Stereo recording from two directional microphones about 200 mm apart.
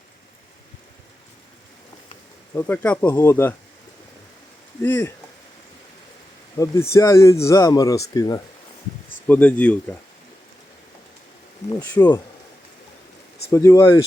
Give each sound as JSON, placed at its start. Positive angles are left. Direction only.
{"t": 2.6, "sound": "speech", "side_deg": 10}
{"t": 4.8, "sound": "speech", "side_deg": 10}
{"t": 6.9, "sound": "speech", "side_deg": 15}
{"t": 9.2, "sound": "speech", "side_deg": 10}
{"t": 11.9, "sound": "speech", "side_deg": 10}
{"t": 13.5, "sound": "speech", "side_deg": 15}